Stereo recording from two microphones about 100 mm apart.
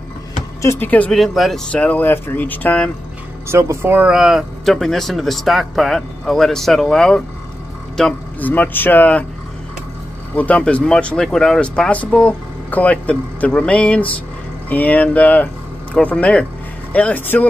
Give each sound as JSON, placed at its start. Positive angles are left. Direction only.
{"t": 0.6, "sound": "speech", "side_deg": 25}
{"t": 1.1, "sound": "speech", "side_deg": 0}
{"t": 1.7, "sound": "speech", "side_deg": 15}
{"t": 3.4, "sound": "speech", "side_deg": -25}
{"t": 4.1, "sound": "speech", "side_deg": -5}
{"t": 8.4, "sound": "speech", "side_deg": 15}
{"t": 10.3, "sound": "speech", "side_deg": 15}